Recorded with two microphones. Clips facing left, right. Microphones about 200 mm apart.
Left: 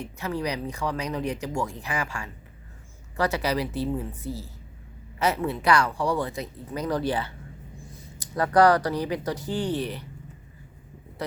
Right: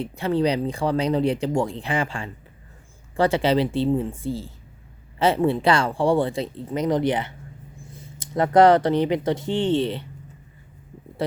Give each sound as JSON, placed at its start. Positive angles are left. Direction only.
{"t": 0.0, "sound": "speech", "side_deg": -30}